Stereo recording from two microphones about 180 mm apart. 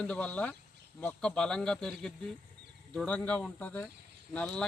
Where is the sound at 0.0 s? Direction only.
5° left (ahead or behind).